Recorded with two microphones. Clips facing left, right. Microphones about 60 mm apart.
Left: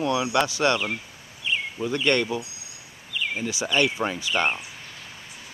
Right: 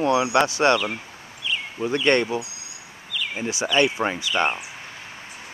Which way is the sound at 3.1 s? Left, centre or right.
Left.